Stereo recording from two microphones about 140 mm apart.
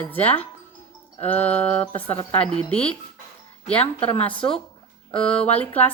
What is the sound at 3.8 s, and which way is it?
Speech, 40° left (ahead or behind).